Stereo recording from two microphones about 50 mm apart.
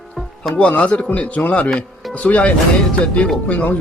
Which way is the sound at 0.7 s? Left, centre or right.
Left.